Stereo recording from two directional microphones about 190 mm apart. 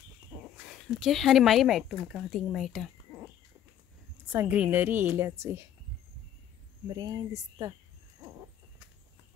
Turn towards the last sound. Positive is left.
turn(degrees=-20)  # may be behind; listen again after turning